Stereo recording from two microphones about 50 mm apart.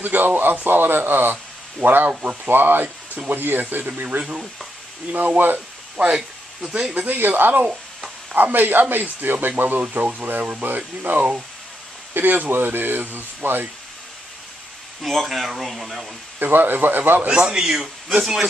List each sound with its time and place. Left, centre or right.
0.0 s a man's voice: right
4.2 s speech: centre
5.1 s a man's voice: right
5.9 s speech: centre
7.1 s a man's voice: right
10.4 s a man's voice: right
11.1 s speech: right
15.0 s speech: centre
16.3 s speech: right
17.3 s speech: centre